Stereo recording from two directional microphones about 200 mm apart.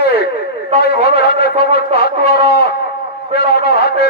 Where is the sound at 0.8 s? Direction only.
55° left (ahead or behind).